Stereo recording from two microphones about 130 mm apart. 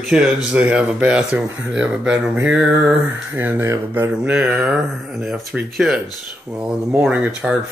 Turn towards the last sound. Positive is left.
turn(degrees=-10)  # may be behind; listen again after turning